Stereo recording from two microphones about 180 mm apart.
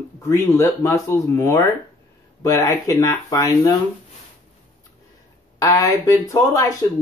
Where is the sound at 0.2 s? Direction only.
15° left (ahead or behind).